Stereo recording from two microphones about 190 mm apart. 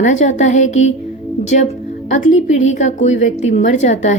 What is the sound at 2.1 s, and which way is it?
A woman's voice, 40° left (ahead or behind).